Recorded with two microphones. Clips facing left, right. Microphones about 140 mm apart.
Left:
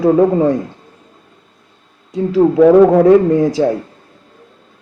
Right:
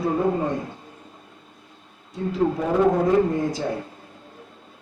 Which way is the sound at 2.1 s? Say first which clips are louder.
Left 11 dB; 90° left.